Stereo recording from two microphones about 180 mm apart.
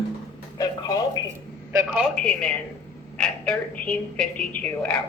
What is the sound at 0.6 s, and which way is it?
Telephone, 20° left (ahead or behind).